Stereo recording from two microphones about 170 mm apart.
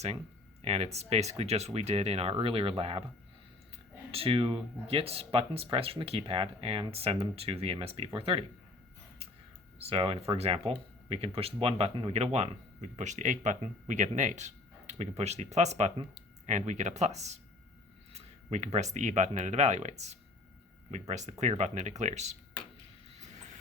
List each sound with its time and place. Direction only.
0.6 s speech: 40° right (ahead or behind)
4.1 s speech: 35° right (ahead or behind)
9.7 s speech: 35° right (ahead or behind)